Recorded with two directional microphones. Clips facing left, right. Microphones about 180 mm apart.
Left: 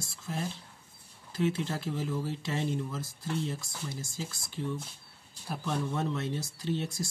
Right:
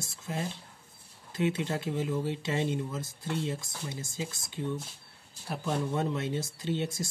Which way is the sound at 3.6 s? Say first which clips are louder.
Even; 20° right (ahead or behind).